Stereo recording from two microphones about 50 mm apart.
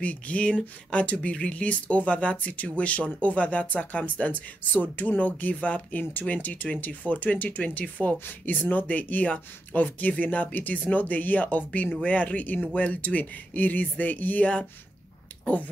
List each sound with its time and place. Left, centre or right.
0.0 s speech: left
7.8 s speech: centre
8.5 s speech: left